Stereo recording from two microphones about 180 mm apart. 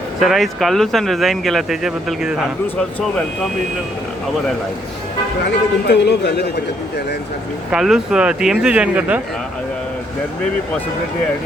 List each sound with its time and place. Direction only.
0.2 s speech: centre (ahead or behind)
5.9 s a man's voice: 70° left (ahead or behind)
7.7 s speech: 5° right (ahead or behind)